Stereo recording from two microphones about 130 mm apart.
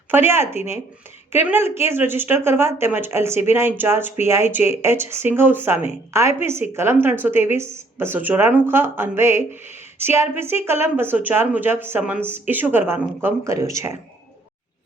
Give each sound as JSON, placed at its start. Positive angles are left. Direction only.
{"t": 0.1, "sound": "speech", "side_deg": -15}